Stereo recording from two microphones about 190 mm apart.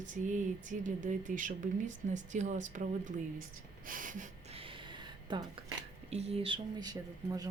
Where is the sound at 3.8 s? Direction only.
45° right (ahead or behind).